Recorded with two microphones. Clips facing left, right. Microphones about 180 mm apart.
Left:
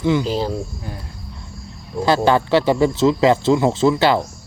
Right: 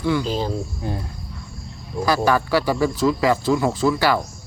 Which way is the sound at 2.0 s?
25° left (ahead or behind).